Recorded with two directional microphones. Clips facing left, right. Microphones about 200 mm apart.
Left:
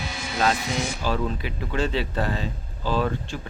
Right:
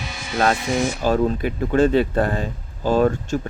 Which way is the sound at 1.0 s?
50° right (ahead or behind).